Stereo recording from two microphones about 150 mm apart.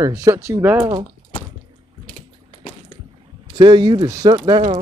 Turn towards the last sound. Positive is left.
turn(degrees=-30)  # may be behind; listen again after turning